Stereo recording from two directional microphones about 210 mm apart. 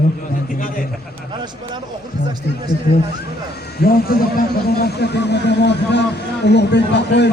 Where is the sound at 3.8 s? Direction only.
45° left (ahead or behind).